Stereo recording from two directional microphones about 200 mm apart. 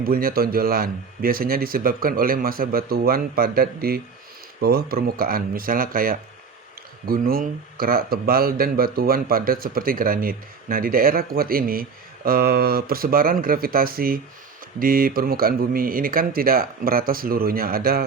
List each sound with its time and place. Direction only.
0.0 s speech: 45° right (ahead or behind)